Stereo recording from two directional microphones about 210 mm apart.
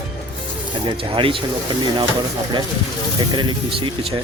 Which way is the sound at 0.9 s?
25° right (ahead or behind).